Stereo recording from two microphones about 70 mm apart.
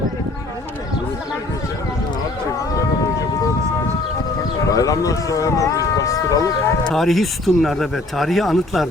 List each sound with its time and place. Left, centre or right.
4.7 s speech: left
6.9 s speech: centre